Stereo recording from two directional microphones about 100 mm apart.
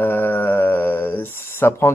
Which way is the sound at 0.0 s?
20° left (ahead or behind).